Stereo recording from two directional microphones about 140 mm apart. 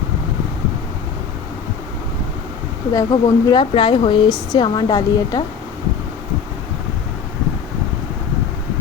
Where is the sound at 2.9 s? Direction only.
30° left (ahead or behind).